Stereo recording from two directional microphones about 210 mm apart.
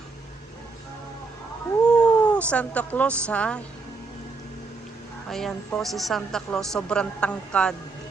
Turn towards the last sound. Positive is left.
turn(degrees=5)  # may be behind; listen again after turning